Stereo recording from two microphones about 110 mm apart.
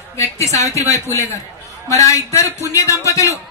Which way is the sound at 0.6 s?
25° left (ahead or behind).